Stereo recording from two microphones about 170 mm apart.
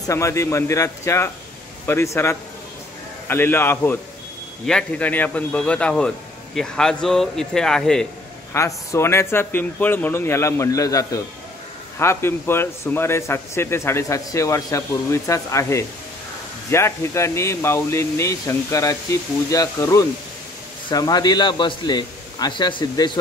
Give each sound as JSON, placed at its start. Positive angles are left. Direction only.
{"t": 0.0, "sound": "a man's voice", "side_deg": 15}
{"t": 8.5, "sound": "a man's voice", "side_deg": 15}